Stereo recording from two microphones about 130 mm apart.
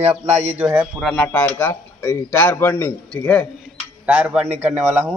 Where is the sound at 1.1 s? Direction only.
15° left (ahead or behind).